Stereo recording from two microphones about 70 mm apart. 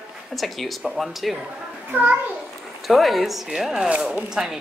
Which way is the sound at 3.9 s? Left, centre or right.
Centre.